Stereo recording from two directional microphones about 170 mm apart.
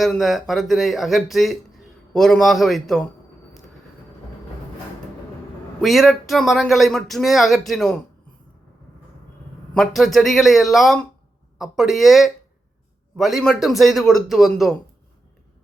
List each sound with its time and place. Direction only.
0.0 s a man's voice: centre (ahead or behind)
5.8 s a man's voice: centre (ahead or behind)
9.7 s a man's voice: centre (ahead or behind)